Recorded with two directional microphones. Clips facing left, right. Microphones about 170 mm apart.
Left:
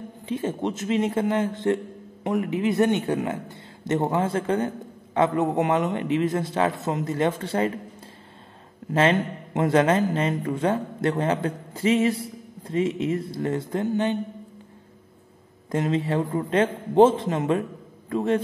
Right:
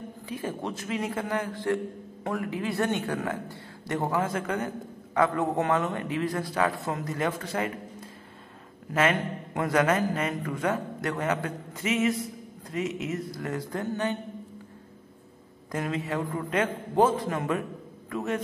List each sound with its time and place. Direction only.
0.3 s a man's voice: 25° left (ahead or behind)
8.9 s a man's voice: 25° left (ahead or behind)
15.7 s a man's voice: 25° left (ahead or behind)